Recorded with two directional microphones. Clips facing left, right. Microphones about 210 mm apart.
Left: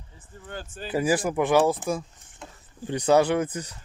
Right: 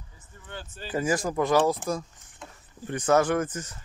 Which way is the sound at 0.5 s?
50° left (ahead or behind).